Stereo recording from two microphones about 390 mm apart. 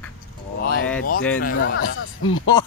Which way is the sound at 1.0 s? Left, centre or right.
Left.